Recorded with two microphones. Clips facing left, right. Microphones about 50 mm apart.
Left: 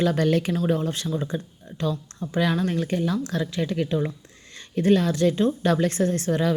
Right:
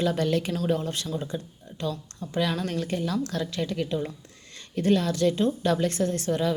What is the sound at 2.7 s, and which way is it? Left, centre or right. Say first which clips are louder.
Speech: left 3 dB; left.